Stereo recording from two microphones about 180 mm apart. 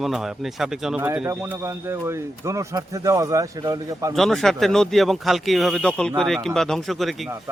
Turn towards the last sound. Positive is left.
turn(degrees=0)  # may be behind; listen again after turning